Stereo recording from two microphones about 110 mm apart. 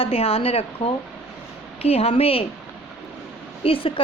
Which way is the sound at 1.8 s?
65° left (ahead or behind).